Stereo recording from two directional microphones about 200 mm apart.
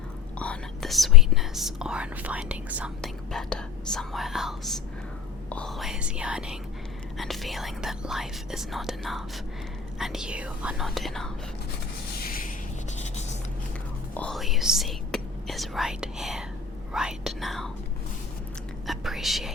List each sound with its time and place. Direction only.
0.3 s speech: 5° left (ahead or behind)
12.2 s rub: 45° left (ahead or behind)
14.1 s speech: 5° left (ahead or behind)
18.9 s speech: centre (ahead or behind)